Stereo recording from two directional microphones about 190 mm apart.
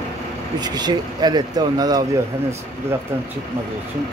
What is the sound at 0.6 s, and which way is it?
Speech, 20° right (ahead or behind).